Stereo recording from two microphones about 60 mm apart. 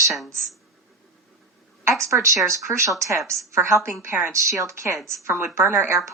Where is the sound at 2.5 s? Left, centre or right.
Right.